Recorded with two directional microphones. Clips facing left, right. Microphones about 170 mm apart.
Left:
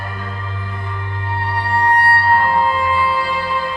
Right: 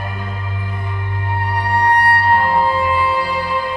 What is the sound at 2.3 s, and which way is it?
Music, 25° right (ahead or behind).